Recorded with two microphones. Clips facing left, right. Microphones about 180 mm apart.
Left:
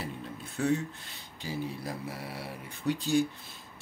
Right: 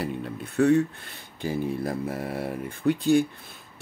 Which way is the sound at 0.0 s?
65° right (ahead or behind).